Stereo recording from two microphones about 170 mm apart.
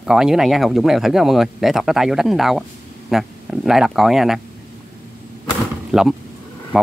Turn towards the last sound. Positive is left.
turn(degrees=-5)  # may be behind; listen again after turning